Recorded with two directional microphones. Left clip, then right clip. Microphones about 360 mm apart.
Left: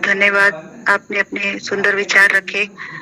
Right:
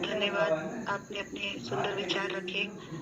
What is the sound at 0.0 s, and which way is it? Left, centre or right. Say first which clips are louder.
A man's voice: left 17 dB; left.